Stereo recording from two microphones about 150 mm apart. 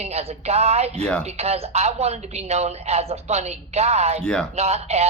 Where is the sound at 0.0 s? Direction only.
45° right (ahead or behind).